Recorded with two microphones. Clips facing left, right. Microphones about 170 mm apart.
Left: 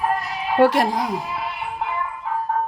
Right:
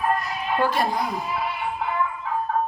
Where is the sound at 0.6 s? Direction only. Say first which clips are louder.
Left 7 dB; 85° left.